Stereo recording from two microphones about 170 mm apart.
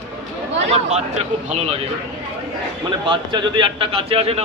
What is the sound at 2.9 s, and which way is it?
A man's voice, 25° right (ahead or behind).